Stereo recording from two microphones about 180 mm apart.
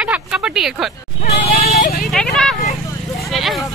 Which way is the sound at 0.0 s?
5° right (ahead or behind).